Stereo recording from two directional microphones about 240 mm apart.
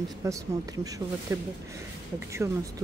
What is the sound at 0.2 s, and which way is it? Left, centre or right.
Speech, centre.